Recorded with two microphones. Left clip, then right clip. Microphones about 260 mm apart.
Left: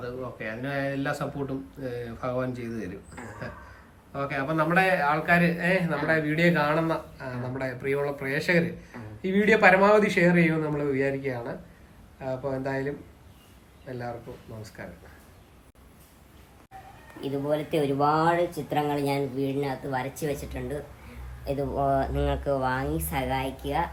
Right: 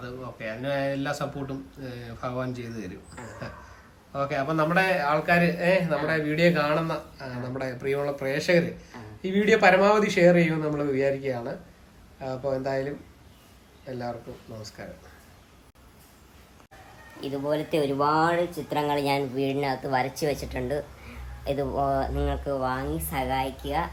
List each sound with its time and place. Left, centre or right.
0.0 s a man's voice: centre
17.2 s speech: centre; by 20.7 s right
21.4 s a man's voice: centre